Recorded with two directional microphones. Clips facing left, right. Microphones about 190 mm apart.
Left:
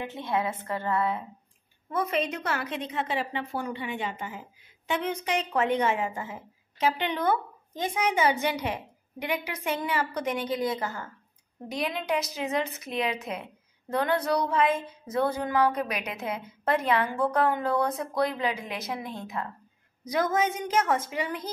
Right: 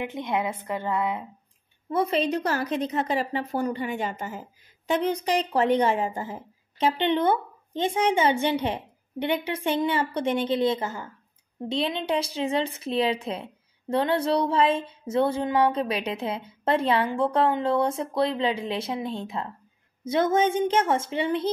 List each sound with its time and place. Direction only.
0.0 s a woman's voice: 15° right (ahead or behind)
1.9 s a woman's voice: 30° right (ahead or behind)